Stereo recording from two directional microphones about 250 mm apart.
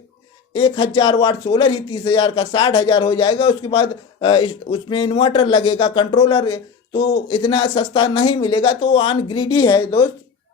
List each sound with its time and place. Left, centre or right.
0.5 s speech: left